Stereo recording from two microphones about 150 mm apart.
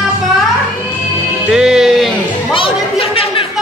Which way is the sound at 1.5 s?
5° right (ahead or behind).